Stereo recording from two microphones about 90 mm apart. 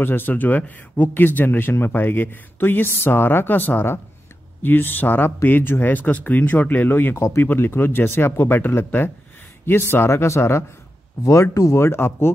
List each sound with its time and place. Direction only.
0.0 s speech: 25° left (ahead or behind)